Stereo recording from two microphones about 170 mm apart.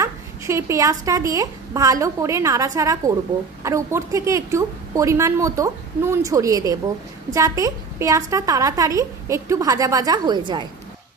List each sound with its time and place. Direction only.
0.0 s a woman's voice: 15° right (ahead or behind)